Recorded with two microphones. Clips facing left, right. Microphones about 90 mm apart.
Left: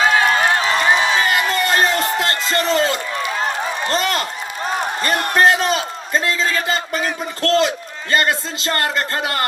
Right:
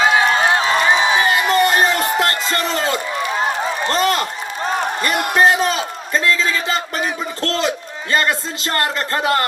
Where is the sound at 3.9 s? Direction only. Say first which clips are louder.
Right 3 dB; 35° right (ahead or behind).